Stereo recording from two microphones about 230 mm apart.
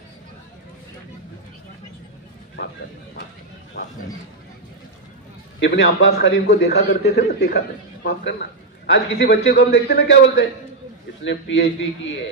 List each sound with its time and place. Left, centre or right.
3.8 s a man's voice: left
5.5 s a man's voice: left